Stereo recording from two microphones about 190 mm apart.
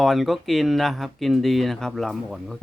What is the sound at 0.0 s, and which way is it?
Speech, centre (ahead or behind).